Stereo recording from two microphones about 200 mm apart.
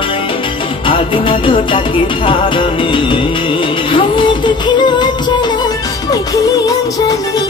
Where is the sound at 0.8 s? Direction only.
25° left (ahead or behind).